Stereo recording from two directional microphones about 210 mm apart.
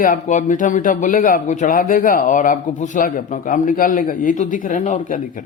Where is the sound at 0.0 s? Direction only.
35° left (ahead or behind).